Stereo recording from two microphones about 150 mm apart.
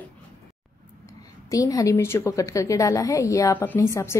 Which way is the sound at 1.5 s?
20° left (ahead or behind).